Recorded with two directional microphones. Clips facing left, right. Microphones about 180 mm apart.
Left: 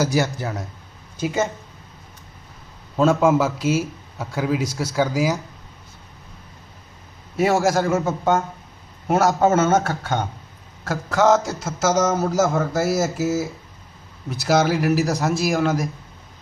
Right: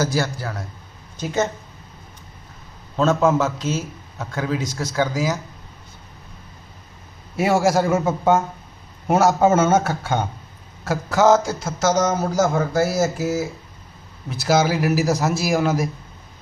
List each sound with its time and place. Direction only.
0.0 s a man's voice: 15° left (ahead or behind)
2.9 s a man's voice: 10° left (ahead or behind)
7.3 s a man's voice: 10° right (ahead or behind)